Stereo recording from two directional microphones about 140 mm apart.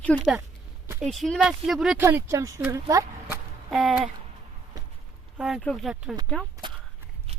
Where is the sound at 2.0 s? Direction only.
20° right (ahead or behind).